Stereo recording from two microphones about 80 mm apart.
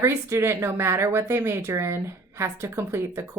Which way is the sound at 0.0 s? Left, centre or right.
Right.